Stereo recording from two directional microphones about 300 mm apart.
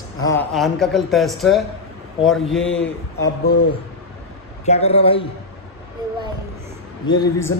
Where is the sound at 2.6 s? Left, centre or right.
Left.